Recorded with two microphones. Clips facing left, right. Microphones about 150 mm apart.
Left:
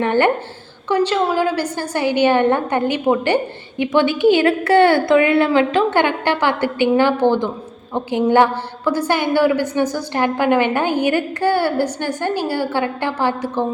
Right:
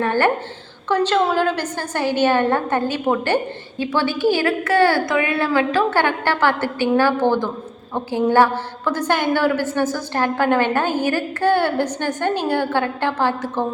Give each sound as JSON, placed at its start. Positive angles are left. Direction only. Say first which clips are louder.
{"t": 0.0, "sound": "a woman's voice", "louder": "left 2 dB", "side_deg": 20}